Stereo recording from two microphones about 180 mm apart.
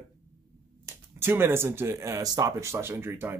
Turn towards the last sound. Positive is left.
turn(degrees=-10)  # may be behind; listen again after turning